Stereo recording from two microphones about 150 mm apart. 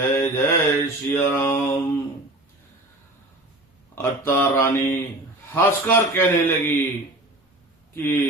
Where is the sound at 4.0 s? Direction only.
15° left (ahead or behind).